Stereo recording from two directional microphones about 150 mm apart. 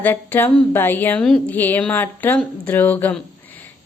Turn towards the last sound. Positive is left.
turn(degrees=10)  # may be behind; listen again after turning